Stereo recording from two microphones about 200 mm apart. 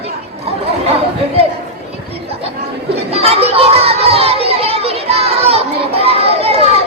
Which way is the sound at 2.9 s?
30° right (ahead or behind).